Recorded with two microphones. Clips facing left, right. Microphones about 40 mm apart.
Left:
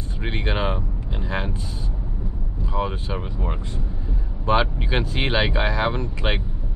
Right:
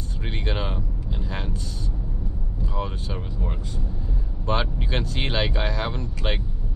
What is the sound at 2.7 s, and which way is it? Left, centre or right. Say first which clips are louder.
Speech: left 6 dB; left.